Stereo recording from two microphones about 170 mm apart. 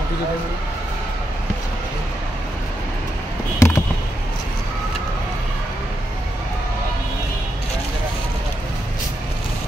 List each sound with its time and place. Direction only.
3.5 s fireworks: 15° left (ahead or behind)